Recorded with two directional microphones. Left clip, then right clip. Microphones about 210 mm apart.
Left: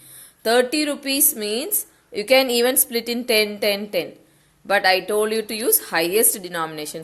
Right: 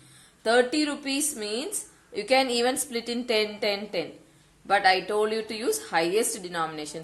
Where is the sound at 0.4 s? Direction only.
45° left (ahead or behind).